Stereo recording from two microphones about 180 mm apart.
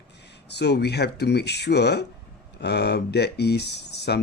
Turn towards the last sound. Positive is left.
turn(degrees=70)  # may be behind; listen again after turning